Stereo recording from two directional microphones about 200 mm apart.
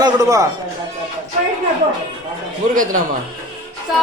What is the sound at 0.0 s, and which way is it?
Speech, 15° right (ahead or behind).